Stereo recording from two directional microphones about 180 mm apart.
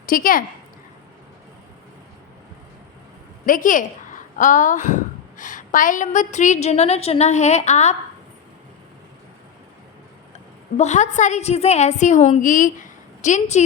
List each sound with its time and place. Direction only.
0.0 s speech: 50° left (ahead or behind)
3.4 s a woman's voice: 50° left (ahead or behind)
10.8 s a woman's voice: 40° left (ahead or behind)